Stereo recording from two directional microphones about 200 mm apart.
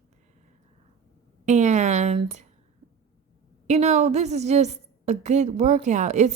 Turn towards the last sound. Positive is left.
turn(degrees=-35)  # may be behind; listen again after turning